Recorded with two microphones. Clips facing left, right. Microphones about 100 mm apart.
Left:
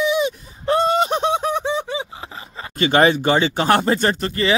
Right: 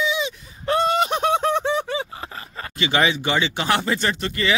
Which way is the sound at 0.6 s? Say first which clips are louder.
Left 2 dB; 35° left (ahead or behind).